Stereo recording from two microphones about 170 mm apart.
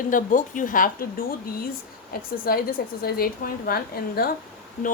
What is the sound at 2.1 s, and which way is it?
A woman's voice, 60° left (ahead or behind).